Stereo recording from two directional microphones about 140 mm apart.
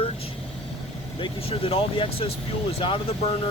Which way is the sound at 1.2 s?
40° left (ahead or behind).